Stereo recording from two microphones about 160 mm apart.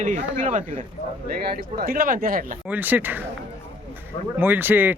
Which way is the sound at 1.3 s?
70° right (ahead or behind).